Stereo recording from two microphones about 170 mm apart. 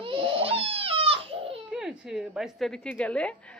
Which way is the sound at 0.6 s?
35° right (ahead or behind).